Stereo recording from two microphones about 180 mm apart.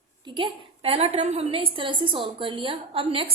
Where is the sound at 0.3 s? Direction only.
25° right (ahead or behind).